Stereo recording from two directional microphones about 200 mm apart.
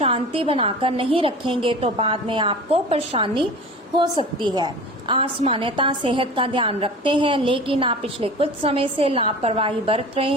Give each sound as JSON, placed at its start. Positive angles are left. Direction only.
{"t": 0.0, "sound": "a woman's voice", "side_deg": -25}